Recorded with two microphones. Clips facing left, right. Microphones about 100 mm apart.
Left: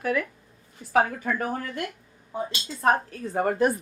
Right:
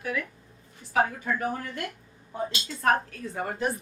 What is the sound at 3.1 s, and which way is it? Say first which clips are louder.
Speech: left 6 dB; 40° left (ahead or behind).